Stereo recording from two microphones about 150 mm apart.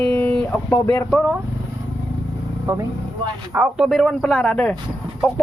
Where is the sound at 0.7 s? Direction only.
20° left (ahead or behind).